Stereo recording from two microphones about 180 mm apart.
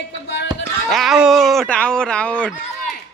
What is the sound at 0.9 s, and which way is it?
Speech, centre (ahead or behind).